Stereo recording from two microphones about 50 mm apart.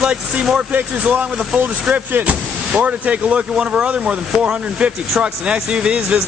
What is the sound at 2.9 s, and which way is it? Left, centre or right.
Speech, right.